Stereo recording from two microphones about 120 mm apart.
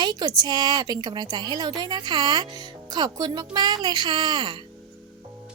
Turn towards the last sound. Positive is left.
turn(degrees=-40)  # may be behind; listen again after turning